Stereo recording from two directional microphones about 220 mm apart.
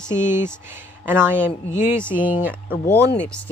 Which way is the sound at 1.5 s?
35° left (ahead or behind).